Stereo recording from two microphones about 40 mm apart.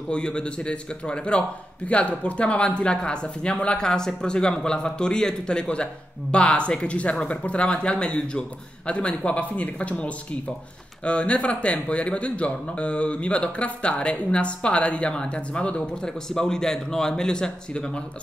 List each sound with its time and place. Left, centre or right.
0.1 s speech: left